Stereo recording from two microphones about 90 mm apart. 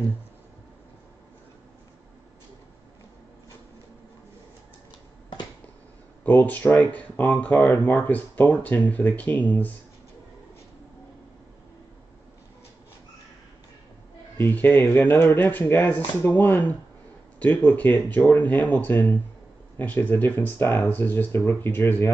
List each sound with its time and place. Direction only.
6.2 s speech: 20° left (ahead or behind)
14.4 s speech: 20° left (ahead or behind)